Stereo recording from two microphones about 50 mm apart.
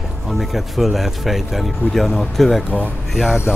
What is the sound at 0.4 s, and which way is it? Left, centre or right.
Speech, centre.